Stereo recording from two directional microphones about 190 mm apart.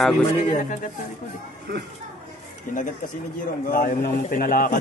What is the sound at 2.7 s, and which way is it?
A man's voice, 45° left (ahead or behind).